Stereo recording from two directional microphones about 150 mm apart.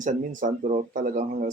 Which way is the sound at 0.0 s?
60° right (ahead or behind).